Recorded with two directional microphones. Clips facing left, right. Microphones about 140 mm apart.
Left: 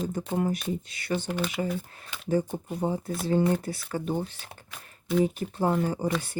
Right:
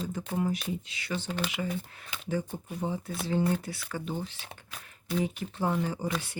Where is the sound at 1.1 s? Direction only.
45° left (ahead or behind).